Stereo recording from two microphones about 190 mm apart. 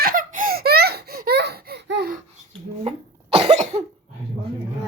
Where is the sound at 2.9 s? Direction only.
35° right (ahead or behind).